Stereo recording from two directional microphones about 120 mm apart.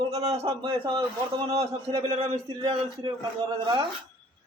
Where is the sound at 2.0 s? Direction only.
55° right (ahead or behind).